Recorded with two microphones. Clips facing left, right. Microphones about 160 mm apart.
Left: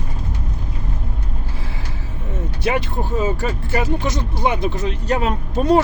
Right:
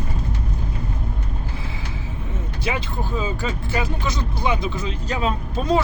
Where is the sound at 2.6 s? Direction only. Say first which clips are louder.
Left 5 dB; 70° left (ahead or behind).